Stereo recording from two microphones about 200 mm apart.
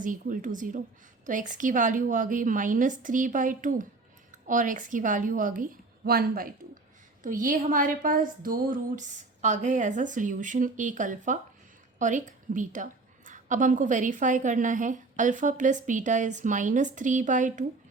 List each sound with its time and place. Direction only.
0.0 s a woman's voice: 40° right (ahead or behind)